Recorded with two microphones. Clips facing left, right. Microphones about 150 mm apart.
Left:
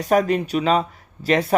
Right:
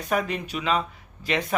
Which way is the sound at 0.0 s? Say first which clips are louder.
Left 8 dB; 35° left (ahead or behind).